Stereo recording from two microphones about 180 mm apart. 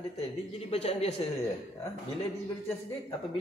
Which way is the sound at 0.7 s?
35° left (ahead or behind).